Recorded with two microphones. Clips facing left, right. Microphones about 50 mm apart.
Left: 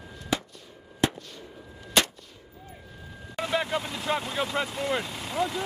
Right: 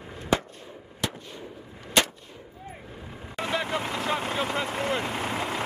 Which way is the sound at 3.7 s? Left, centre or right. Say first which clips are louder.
Right 1 dB; right.